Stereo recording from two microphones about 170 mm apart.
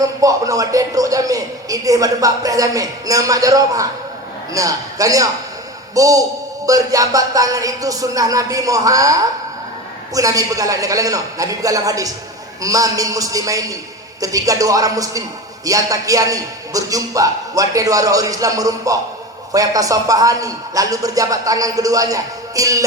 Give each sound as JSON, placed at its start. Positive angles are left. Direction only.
{"t": 0.0, "sound": "speech", "side_deg": -20}
{"t": 10.2, "sound": "speech", "side_deg": -20}